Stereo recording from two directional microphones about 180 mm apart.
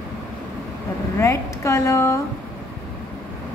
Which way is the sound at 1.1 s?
15° left (ahead or behind).